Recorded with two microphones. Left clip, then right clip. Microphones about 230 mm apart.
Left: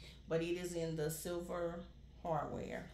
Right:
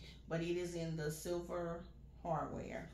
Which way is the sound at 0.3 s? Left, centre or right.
Left.